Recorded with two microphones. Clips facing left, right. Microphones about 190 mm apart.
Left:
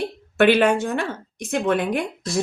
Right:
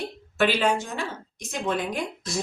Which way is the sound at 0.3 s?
60° left (ahead or behind).